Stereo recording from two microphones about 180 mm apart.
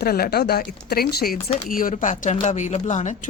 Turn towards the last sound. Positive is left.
turn(degrees=40)  # may be behind; listen again after turning